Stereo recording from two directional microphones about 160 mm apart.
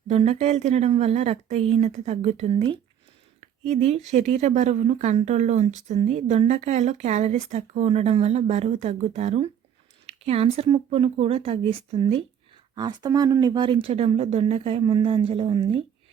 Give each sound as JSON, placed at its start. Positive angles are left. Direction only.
{"t": 0.1, "sound": "speech", "side_deg": -40}
{"t": 3.7, "sound": "speech", "side_deg": -45}
{"t": 12.7, "sound": "speech", "side_deg": -25}